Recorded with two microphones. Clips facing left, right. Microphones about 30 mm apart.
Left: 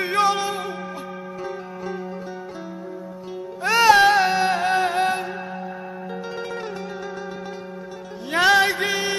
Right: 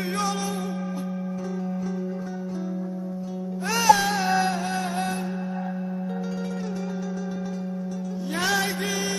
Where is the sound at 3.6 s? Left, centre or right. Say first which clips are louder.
Left 5 dB; left.